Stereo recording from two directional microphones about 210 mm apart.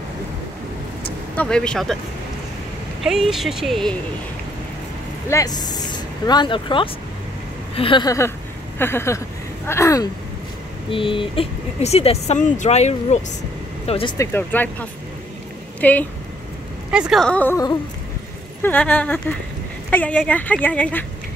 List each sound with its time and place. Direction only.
1.3 s speech: 5° left (ahead or behind)
3.0 s speech: centre (ahead or behind)
5.3 s a woman's voice: 20° left (ahead or behind)
10.9 s speech: 25° left (ahead or behind)
14.1 s a woman's voice: 10° left (ahead or behind)
16.9 s a woman's voice: 5° right (ahead or behind)